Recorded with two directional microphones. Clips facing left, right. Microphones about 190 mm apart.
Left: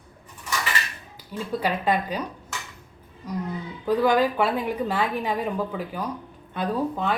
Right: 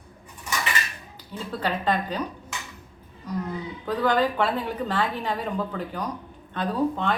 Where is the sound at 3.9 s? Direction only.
10° left (ahead or behind).